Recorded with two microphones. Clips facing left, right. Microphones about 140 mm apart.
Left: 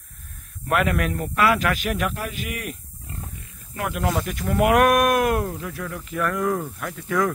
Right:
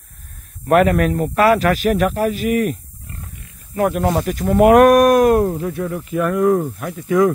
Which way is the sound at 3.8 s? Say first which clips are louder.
Right 8 dB; 40° right (ahead or behind).